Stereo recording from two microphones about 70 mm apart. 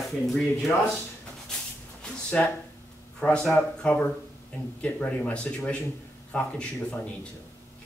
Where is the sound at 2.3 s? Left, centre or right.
Centre.